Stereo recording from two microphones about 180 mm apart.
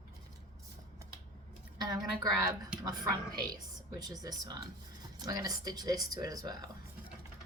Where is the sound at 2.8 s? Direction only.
20° right (ahead or behind).